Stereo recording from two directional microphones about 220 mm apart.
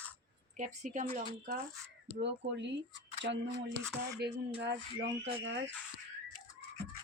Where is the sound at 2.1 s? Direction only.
50° right (ahead or behind).